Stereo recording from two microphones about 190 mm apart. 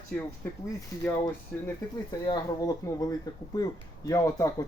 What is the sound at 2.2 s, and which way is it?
Speech, 20° left (ahead or behind).